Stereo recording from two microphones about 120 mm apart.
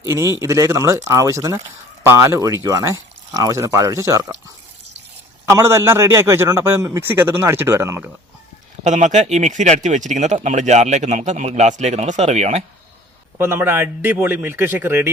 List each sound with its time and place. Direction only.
0.3 s a man's voice: 25° right (ahead or behind)
5.5 s a man's voice: 20° right (ahead or behind)
8.8 s speech: 85° right; by 12.6 s 65° right (ahead or behind)
13.4 s a man's voice: 20° right (ahead or behind)